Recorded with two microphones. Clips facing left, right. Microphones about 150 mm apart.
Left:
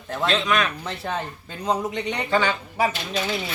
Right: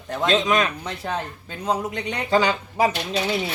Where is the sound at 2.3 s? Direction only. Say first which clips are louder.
Right 3 dB; 35° right (ahead or behind).